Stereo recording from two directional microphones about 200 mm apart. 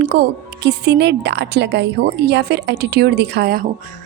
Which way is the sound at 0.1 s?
55° right (ahead or behind).